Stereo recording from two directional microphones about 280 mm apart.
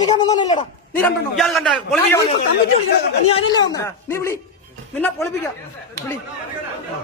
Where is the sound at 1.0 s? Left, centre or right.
Centre.